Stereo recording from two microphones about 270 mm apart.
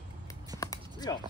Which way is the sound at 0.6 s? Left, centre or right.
Centre.